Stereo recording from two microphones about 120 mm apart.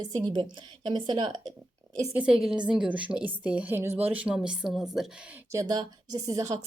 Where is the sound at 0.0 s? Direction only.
35° right (ahead or behind).